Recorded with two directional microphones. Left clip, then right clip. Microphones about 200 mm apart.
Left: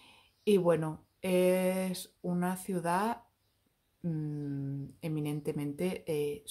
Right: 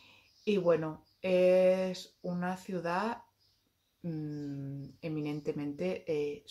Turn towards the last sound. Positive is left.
turn(degrees=40)  # may be behind; listen again after turning